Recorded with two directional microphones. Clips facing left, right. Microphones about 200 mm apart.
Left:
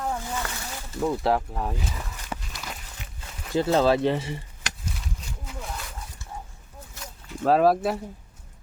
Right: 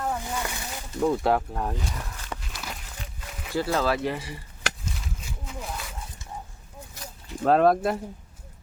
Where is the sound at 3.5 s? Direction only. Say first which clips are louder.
Left 4 dB; 20° left (ahead or behind).